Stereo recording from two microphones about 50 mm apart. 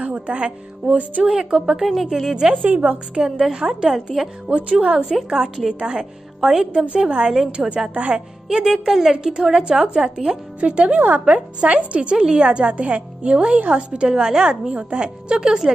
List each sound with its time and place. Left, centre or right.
0.0 s a woman's voice: right; by 2.5 s centre
2.5 s a woman's voice: right
3.2 s a woman's voice: centre
4.5 s a woman's voice: right
6.7 s a woman's voice: right
7.9 s a woman's voice: right
8.5 s a woman's voice: centre